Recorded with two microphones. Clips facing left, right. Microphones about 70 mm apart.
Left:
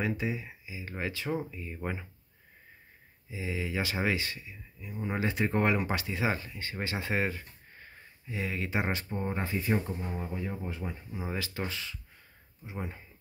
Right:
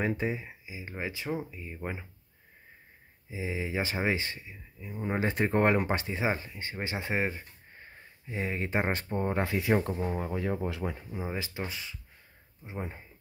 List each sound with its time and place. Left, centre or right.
0.0 s speech: right
0.5 s speech: right
3.3 s speech: right
8.3 s speech: right
11.2 s speech: right